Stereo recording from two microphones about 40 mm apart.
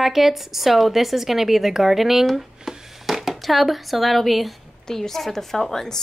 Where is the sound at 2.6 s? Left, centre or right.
Centre.